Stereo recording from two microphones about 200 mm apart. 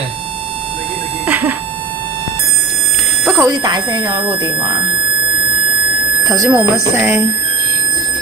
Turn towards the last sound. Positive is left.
turn(degrees=-15)  # may be behind; listen again after turning